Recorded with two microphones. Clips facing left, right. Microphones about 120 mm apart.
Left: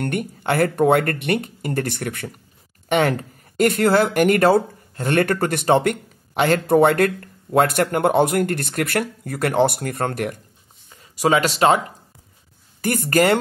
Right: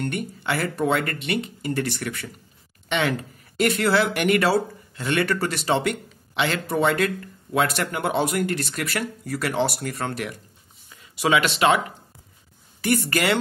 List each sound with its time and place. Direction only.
0.0 s speech: 55° left (ahead or behind); by 11.8 s 40° left (ahead or behind)
12.8 s speech: 45° left (ahead or behind)